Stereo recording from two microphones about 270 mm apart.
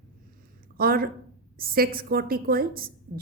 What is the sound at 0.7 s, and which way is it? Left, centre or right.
Speech, right.